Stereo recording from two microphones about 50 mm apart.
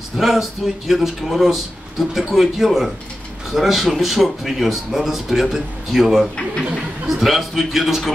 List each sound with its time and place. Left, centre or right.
0.2 s speech: centre